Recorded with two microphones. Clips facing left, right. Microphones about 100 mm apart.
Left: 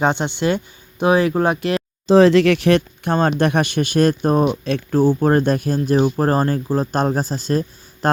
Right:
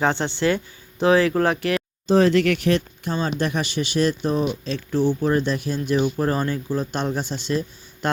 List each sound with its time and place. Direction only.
0.0 s speech: 20° left (ahead or behind)
2.0 s speech: 90° left; by 8.2 s 40° left (ahead or behind)